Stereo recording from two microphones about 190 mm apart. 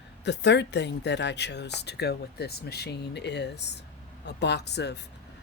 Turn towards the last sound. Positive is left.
turn(degrees=60)  # may be behind; listen again after turning